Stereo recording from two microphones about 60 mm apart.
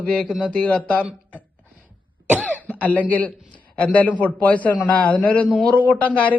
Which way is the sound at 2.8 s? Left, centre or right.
Left.